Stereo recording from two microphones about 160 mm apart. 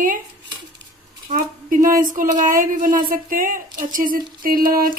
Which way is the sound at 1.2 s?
55° right (ahead or behind).